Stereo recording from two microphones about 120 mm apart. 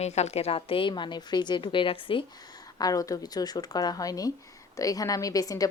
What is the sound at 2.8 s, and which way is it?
A woman's voice, 30° left (ahead or behind).